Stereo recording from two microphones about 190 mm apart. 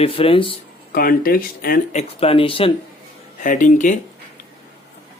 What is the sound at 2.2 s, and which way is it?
Speech, 30° left (ahead or behind).